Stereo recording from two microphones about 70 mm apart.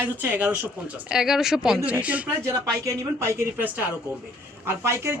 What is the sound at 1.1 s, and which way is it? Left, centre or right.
Speech, centre.